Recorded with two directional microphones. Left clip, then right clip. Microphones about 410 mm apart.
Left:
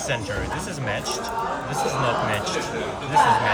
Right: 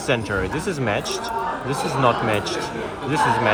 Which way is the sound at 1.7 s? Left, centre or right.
Centre.